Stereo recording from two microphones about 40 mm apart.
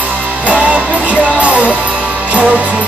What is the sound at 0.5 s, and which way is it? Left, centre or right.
Music, right.